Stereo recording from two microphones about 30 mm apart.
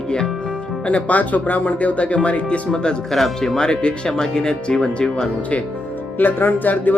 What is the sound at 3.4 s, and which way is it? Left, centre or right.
Speech, left.